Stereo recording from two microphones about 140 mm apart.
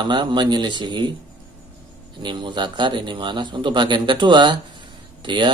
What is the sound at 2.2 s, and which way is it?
Speech, 35° right (ahead or behind).